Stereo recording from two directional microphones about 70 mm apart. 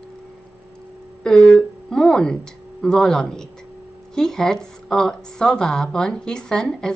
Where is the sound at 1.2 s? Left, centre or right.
Centre.